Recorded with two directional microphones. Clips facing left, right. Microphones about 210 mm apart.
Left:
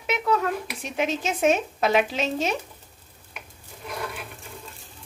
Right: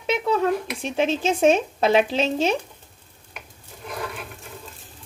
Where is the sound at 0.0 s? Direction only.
30° right (ahead or behind).